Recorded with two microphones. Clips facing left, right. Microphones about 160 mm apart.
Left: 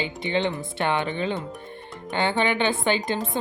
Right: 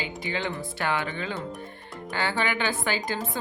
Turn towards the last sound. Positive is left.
turn(degrees=25)  # may be behind; listen again after turning